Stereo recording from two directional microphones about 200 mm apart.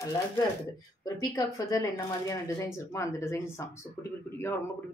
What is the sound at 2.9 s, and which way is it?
Speech, 15° left (ahead or behind).